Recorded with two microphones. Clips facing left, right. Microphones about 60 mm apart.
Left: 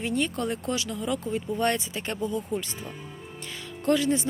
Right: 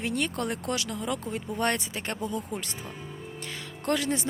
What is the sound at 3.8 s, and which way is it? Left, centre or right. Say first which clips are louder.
Speech: left 4 dB; right.